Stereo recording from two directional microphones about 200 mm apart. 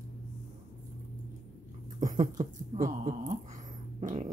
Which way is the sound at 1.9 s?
40° right (ahead or behind).